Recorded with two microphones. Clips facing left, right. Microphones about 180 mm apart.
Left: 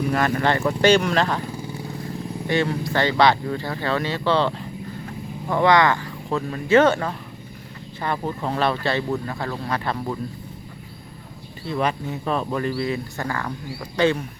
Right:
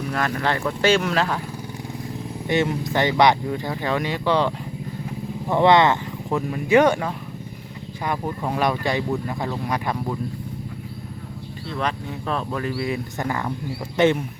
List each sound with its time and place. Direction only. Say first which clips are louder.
0.1 s speech: left 1 dB; centre (ahead or behind)
2.5 s speech: right 1 dB; 20° right (ahead or behind)
11.7 s speech: left 3 dB; 5° left (ahead or behind); by 14.2 s 20° right (ahead or behind)